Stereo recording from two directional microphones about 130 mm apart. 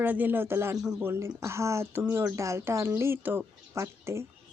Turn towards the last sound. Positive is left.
turn(degrees=-20)  # may be behind; listen again after turning